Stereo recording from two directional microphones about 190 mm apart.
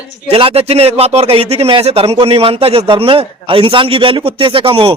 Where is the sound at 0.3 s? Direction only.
30° right (ahead or behind).